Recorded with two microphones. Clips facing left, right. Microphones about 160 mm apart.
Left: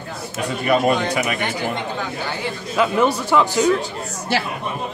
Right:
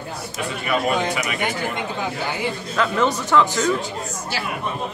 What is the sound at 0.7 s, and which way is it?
Speech, 40° left (ahead or behind).